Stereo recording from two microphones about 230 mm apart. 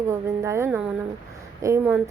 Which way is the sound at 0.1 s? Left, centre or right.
Centre.